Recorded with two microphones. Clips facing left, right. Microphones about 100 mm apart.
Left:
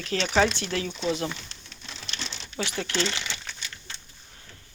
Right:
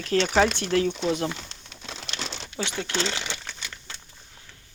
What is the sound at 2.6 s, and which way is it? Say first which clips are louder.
Speech: even; 25° right (ahead or behind).